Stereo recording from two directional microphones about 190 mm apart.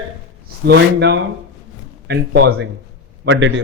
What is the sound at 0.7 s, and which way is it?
A man's voice, 65° right (ahead or behind).